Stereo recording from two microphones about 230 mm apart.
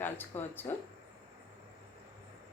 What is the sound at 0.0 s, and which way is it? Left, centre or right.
Speech, centre.